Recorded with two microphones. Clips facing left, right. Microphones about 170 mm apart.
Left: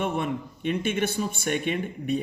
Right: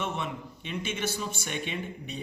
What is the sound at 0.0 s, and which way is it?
Speech, 55° left (ahead or behind).